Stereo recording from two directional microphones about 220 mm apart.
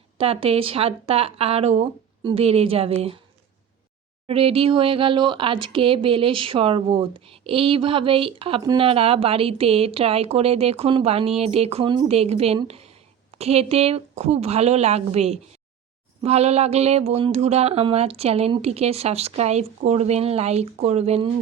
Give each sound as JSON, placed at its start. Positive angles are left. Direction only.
{"t": 0.2, "sound": "speech", "side_deg": -25}
{"t": 4.3, "sound": "speech", "side_deg": -25}